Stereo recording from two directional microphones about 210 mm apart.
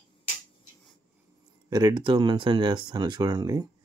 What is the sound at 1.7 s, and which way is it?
Speech, 20° right (ahead or behind).